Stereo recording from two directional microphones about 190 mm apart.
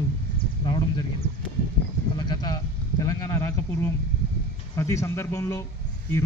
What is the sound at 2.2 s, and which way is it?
A man's voice, 20° left (ahead or behind).